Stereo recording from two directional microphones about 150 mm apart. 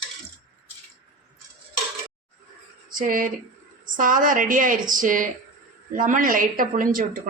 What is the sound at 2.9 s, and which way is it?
Speech, 65° right (ahead or behind).